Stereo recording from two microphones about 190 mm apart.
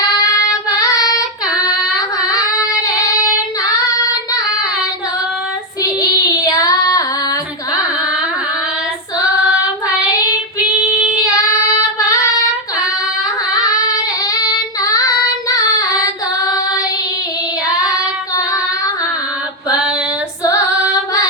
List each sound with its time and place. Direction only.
0.2 s child singing: 20° left (ahead or behind)
5.8 s child singing: 20° left (ahead or behind)
10.6 s female singing: 5° right (ahead or behind)
11.3 s child singing: 20° left (ahead or behind)
14.3 s child singing: 20° left (ahead or behind)